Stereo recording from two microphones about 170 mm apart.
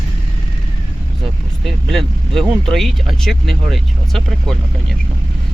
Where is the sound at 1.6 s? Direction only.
Centre (ahead or behind).